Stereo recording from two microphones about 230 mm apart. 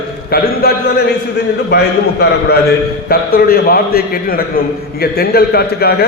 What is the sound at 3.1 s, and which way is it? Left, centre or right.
A man's voice, left.